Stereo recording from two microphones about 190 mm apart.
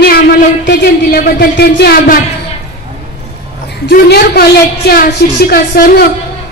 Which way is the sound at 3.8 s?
55° left (ahead or behind).